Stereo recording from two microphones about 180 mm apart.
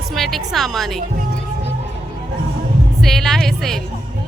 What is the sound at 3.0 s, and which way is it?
Speech, centre (ahead or behind).